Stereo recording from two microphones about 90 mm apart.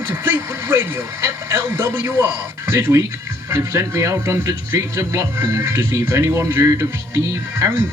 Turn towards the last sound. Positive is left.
turn(degrees=-30)  # may be behind; listen again after turning